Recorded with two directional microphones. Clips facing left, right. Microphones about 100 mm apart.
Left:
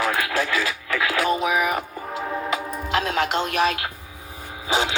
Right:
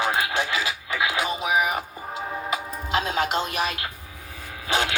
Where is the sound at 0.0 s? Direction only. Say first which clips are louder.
Left 1 dB; 25° right (ahead or behind).